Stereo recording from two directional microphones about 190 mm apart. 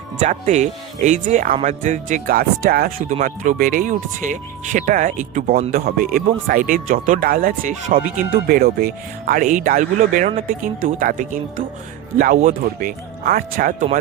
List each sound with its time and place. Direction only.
0.2 s speech: 40° right (ahead or behind)